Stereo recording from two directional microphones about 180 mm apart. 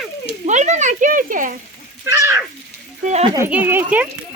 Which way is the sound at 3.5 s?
10° right (ahead or behind).